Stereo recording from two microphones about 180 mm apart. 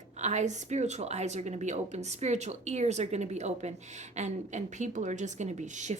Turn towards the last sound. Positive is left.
turn(degrees=-40)  # may be behind; listen again after turning